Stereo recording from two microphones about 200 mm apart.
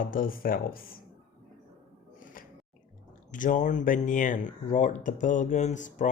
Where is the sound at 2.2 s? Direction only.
45° left (ahead or behind).